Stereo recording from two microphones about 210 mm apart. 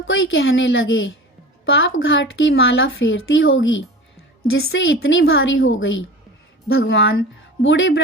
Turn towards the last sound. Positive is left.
turn(degrees=65)  # may be behind; listen again after turning